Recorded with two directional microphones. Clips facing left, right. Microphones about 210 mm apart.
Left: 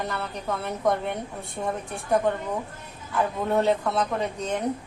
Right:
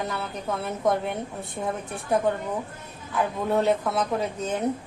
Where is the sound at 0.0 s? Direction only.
Centre (ahead or behind).